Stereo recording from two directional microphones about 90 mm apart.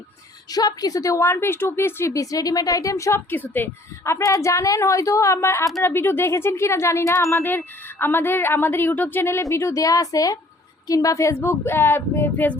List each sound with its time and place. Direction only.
0.5 s a woman's voice: 45° left (ahead or behind); by 3.7 s 20° left (ahead or behind)
4.0 s a woman's voice: 35° left (ahead or behind)